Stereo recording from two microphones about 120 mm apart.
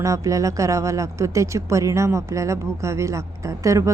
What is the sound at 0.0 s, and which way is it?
Speech, 25° right (ahead or behind).